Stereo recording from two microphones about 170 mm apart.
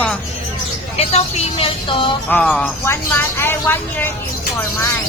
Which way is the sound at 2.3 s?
5° left (ahead or behind).